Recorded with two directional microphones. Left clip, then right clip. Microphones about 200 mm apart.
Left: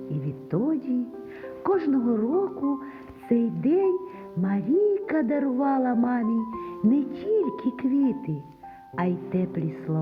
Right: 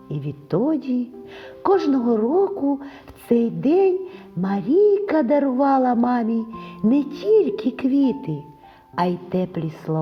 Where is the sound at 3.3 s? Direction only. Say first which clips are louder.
Right 5 dB; 45° right (ahead or behind).